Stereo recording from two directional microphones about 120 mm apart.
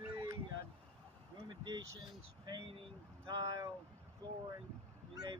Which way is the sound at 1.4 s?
35° right (ahead or behind).